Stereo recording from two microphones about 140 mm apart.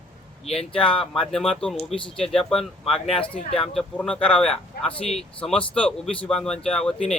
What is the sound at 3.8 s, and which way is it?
Speech, 5° left (ahead or behind).